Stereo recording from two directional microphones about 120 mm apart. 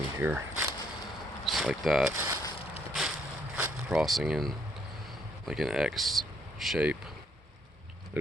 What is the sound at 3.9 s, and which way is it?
Speech, centre (ahead or behind).